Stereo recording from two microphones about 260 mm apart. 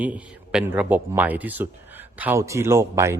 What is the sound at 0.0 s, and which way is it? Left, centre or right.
Speech, centre.